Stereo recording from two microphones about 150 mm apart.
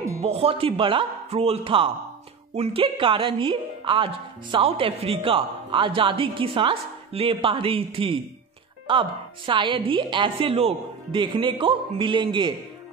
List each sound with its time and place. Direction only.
0.2 s a woman's voice: 40° right (ahead or behind)